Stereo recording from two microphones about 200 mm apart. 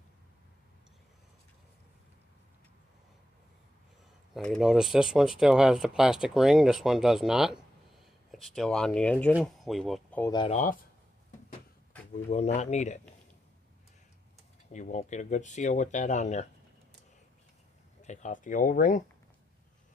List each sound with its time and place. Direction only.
4.3 s speech: centre (ahead or behind)
10.2 s speech: 20° left (ahead or behind)
10.5 s speech: 40° left (ahead or behind)
12.1 s speech: 35° left (ahead or behind)
14.7 s speech: 40° left (ahead or behind)
18.0 s speech: 35° left (ahead or behind)